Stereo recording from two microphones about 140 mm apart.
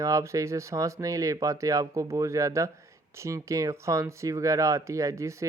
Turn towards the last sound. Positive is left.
turn(degrees=-20)  # may be behind; listen again after turning